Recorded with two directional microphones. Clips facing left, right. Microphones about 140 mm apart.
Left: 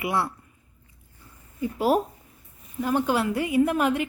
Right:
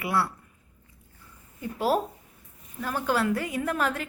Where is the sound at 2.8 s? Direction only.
15° left (ahead or behind).